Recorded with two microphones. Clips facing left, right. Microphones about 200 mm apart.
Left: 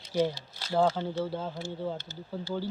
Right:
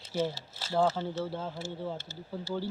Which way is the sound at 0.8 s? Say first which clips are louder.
Left 2 dB; 5° right (ahead or behind).